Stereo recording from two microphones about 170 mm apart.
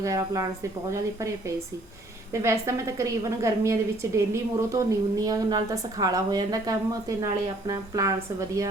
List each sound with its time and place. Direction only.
0.0 s a woman's voice: 20° right (ahead or behind)